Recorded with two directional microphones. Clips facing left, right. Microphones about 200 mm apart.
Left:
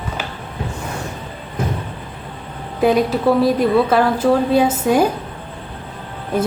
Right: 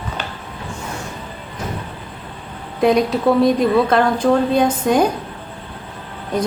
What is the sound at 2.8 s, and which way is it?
A woman's voice, 5° left (ahead or behind).